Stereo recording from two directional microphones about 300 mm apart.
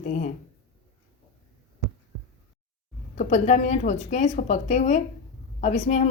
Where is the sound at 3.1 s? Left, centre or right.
Left.